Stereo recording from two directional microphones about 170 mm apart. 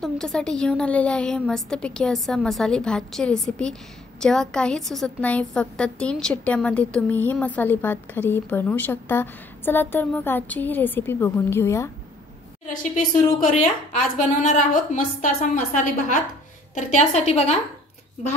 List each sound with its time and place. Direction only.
0.0 s a woman's voice: 5° left (ahead or behind)
12.7 s a woman's voice: 50° left (ahead or behind)